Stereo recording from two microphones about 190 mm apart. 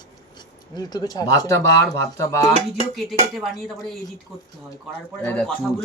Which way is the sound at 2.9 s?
Centre (ahead or behind).